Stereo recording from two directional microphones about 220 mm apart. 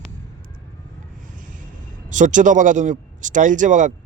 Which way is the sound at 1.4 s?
35° right (ahead or behind).